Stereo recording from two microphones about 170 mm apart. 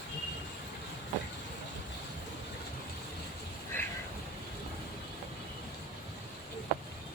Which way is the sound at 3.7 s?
10° left (ahead or behind).